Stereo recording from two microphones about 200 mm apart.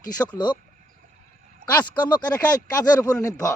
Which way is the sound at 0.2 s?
15° left (ahead or behind).